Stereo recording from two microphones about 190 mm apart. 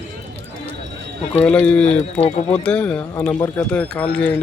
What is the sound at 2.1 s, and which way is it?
Speech, 30° left (ahead or behind).